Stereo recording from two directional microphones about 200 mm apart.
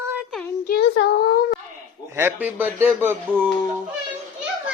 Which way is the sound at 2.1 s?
10° right (ahead or behind).